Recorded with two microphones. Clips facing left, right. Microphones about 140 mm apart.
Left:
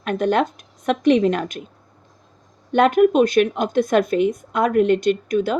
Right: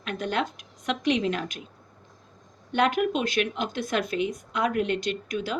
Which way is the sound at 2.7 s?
45° left (ahead or behind).